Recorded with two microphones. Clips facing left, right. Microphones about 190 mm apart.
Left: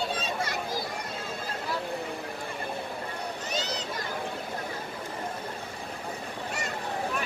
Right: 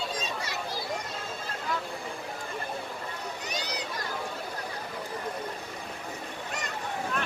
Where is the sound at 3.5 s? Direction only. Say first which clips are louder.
Left 3 dB; 15° right (ahead or behind).